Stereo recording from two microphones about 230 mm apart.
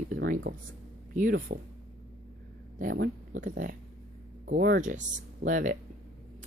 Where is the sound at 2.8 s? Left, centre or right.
Right.